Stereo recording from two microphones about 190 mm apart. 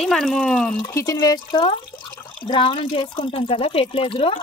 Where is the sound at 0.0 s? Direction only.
Centre (ahead or behind).